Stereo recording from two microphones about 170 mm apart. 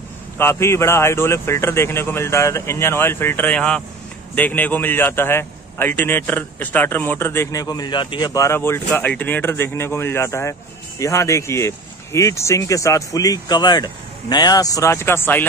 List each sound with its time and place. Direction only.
0.4 s a man's voice: 15° left (ahead or behind)